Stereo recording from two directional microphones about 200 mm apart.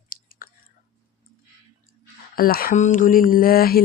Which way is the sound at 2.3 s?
45° left (ahead or behind).